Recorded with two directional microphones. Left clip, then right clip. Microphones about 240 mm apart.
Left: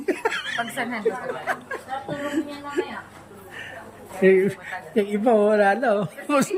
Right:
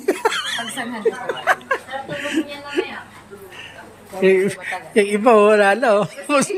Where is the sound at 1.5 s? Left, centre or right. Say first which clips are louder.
Right 11 dB; centre.